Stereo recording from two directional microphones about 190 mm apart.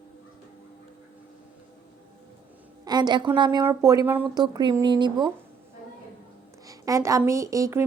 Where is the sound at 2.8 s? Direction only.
20° right (ahead or behind).